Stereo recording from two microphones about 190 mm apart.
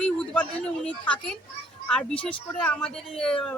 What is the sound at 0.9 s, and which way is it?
Speech, 5° left (ahead or behind).